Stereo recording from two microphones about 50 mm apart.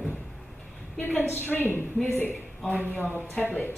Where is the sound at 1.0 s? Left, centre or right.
Left.